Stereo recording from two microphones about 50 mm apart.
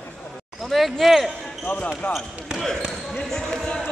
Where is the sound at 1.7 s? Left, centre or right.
Left.